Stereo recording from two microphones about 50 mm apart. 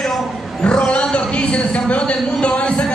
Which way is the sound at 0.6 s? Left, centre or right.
Left.